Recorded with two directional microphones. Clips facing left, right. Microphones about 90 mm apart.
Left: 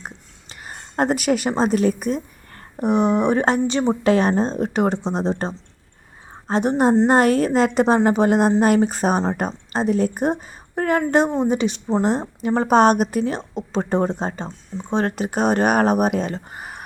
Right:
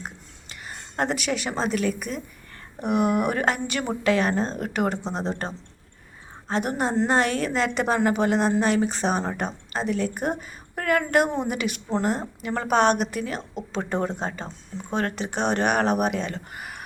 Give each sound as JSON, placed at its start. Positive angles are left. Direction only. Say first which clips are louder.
{"t": 0.0, "sound": "a sound", "louder": "left 1 dB", "side_deg": 40}
{"t": 2.8, "sound": "speech", "louder": "left 5 dB", "side_deg": 30}
{"t": 14.4, "sound": "speech", "louder": "left 5 dB", "side_deg": 20}
{"t": 14.9, "sound": "speech", "louder": "left 5 dB", "side_deg": 40}